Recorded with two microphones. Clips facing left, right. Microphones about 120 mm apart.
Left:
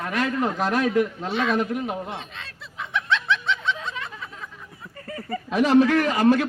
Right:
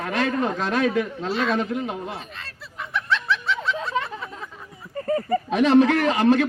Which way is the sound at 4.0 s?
35° right (ahead or behind).